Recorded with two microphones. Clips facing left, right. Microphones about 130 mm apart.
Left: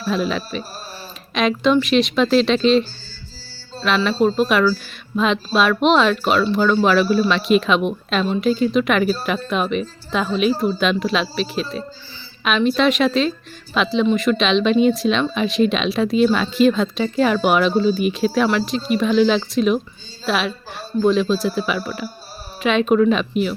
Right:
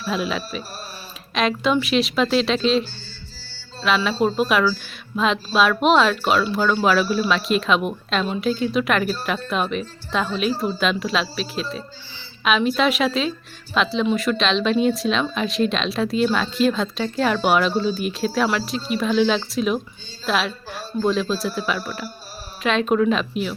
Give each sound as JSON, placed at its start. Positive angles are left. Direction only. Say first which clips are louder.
{"t": 0.0, "sound": "speech", "louder": "left 3 dB", "side_deg": -5}
{"t": 3.8, "sound": "speech", "louder": "left 3 dB", "side_deg": -5}